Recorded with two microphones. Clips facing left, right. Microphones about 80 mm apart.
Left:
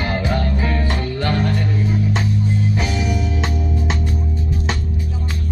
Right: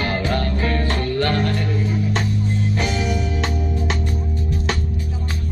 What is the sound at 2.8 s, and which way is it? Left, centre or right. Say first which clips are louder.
Music: even; centre.